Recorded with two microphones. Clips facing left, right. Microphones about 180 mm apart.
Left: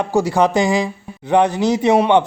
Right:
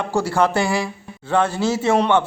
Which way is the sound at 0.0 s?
15° left (ahead or behind).